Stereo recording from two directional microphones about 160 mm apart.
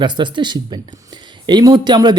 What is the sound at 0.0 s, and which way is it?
Speech, 30° right (ahead or behind).